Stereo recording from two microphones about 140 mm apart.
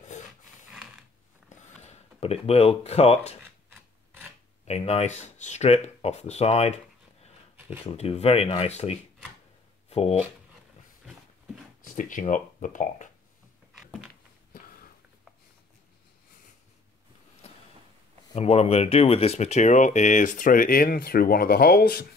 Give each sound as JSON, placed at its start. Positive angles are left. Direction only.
{"t": 0.7, "sound": "a sound", "side_deg": -5}
{"t": 1.8, "sound": "speech", "side_deg": 50}
{"t": 3.7, "sound": "rub", "side_deg": -15}
{"t": 4.6, "sound": "speech", "side_deg": 50}
{"t": 7.8, "sound": "speech", "side_deg": 45}
{"t": 11.8, "sound": "speech", "side_deg": 70}
{"t": 18.3, "sound": "speech", "side_deg": 50}